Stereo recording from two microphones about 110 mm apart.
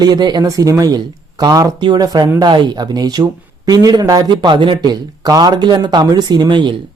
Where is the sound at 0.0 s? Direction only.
40° right (ahead or behind).